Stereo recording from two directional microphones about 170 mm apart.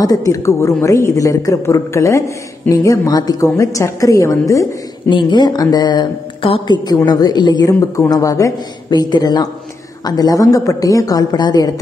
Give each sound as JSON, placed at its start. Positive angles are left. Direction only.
{"t": 0.0, "sound": "a woman's voice", "side_deg": 20}